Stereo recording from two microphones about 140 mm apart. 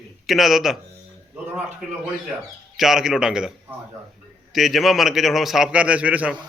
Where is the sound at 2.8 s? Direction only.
5° right (ahead or behind).